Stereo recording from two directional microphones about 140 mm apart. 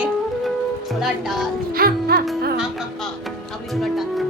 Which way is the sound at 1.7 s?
90° right.